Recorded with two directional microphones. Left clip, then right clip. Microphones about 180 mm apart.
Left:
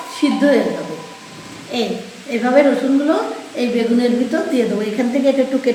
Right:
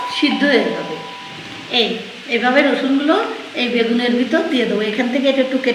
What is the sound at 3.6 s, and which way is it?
Speech, 10° left (ahead or behind).